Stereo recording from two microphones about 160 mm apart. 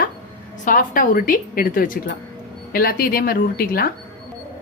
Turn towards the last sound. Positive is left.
turn(degrees=70)  # may be behind; listen again after turning